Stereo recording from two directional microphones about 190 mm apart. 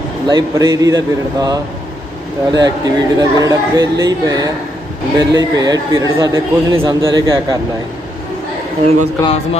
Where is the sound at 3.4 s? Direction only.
20° right (ahead or behind).